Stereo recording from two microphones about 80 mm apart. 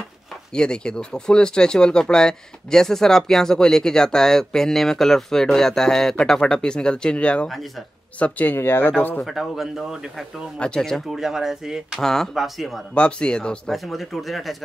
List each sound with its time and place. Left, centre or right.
0.5 s speech: centre
9.2 s speech: centre
12.0 s speech: centre
12.9 s speech: centre
13.7 s speech: centre